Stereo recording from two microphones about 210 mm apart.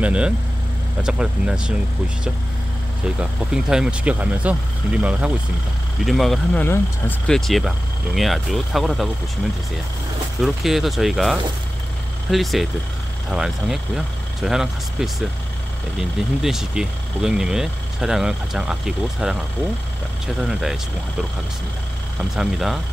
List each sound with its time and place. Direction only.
0.0 s speech: 5° right (ahead or behind)
3.2 s speech: 5° right (ahead or behind)
10.4 s speech: centre (ahead or behind)
20.3 s speech: centre (ahead or behind)
22.3 s speech: centre (ahead or behind)